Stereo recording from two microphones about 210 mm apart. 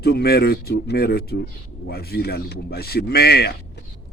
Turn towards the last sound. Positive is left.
turn(degrees=50)  # may be behind; listen again after turning